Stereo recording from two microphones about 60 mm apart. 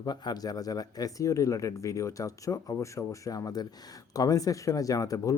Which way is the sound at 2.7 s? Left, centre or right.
Left.